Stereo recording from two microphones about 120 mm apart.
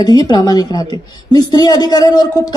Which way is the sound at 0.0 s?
35° left (ahead or behind).